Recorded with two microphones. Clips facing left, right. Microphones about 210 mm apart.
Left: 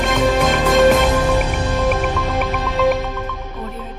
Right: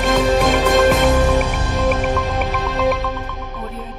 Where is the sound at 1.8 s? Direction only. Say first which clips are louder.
Right 2 dB; centre (ahead or behind).